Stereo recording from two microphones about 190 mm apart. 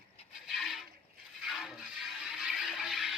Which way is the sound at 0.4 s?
Centre (ahead or behind).